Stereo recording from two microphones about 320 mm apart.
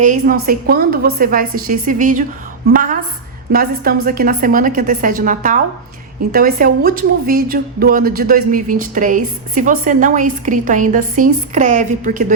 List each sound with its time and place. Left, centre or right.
0.0 s a woman's voice: right